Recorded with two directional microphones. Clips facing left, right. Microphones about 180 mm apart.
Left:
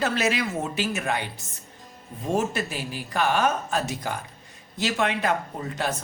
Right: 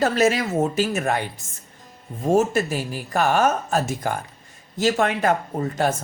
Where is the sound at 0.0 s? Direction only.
45° right (ahead or behind).